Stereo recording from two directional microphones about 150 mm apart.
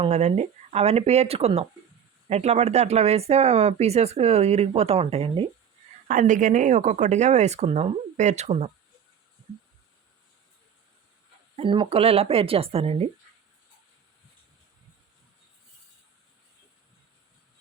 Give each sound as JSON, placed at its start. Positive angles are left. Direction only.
{"t": 0.0, "sound": "speech", "side_deg": -50}
{"t": 6.1, "sound": "speech", "side_deg": -60}
{"t": 11.5, "sound": "speech", "side_deg": -35}